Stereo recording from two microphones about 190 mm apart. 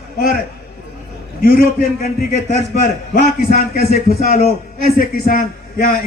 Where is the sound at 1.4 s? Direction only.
50° left (ahead or behind).